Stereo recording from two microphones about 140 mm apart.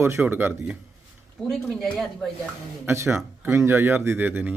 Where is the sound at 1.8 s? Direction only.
Centre (ahead or behind).